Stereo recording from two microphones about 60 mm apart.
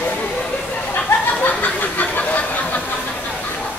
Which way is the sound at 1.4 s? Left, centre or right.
Left.